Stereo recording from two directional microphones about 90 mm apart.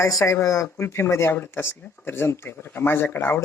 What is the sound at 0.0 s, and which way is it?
Speech, 35° left (ahead or behind).